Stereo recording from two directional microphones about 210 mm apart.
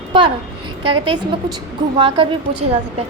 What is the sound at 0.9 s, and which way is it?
A woman's voice, 20° right (ahead or behind).